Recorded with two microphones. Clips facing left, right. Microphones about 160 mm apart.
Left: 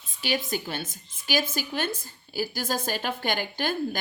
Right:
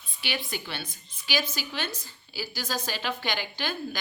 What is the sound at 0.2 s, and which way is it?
Speech, 45° left (ahead or behind).